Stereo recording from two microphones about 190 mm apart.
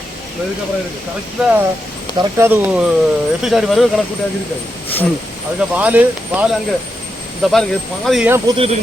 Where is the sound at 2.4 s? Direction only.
10° right (ahead or behind).